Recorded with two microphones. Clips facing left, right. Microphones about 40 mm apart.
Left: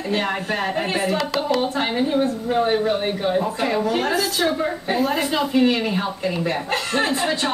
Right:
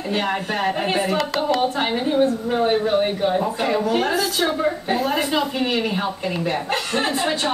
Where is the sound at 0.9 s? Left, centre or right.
Centre.